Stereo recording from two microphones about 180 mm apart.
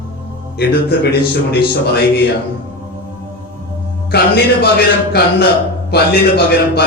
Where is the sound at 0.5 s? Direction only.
60° left (ahead or behind).